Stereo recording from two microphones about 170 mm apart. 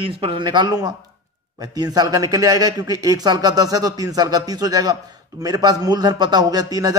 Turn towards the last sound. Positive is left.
turn(degrees=-20)  # may be behind; listen again after turning